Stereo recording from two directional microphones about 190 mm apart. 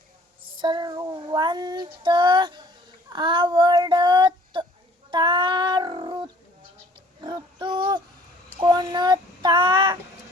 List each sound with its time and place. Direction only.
0.5 s child singing: 25° right (ahead or behind)
5.1 s a sound: 25° right (ahead or behind)
7.2 s child singing: 25° right (ahead or behind)